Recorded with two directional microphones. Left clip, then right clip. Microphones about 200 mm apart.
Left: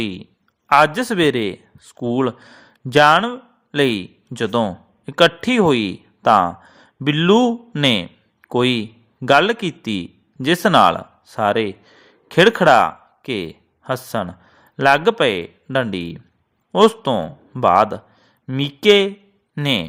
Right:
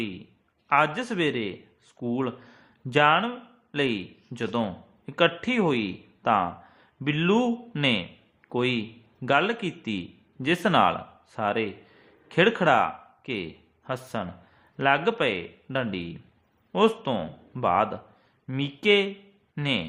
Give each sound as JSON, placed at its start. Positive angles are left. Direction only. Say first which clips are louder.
{"t": 0.9, "sound": "a man's voice", "louder": "left 10 dB", "side_deg": 40}